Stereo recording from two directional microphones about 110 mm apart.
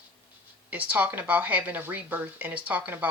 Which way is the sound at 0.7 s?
15° right (ahead or behind).